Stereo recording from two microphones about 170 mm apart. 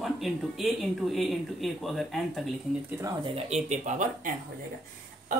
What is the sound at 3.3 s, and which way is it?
Speech, 40° right (ahead or behind).